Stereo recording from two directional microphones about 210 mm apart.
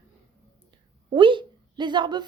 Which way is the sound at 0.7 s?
25° right (ahead or behind).